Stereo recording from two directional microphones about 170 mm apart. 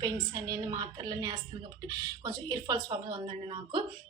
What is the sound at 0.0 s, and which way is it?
Speech, 20° right (ahead or behind).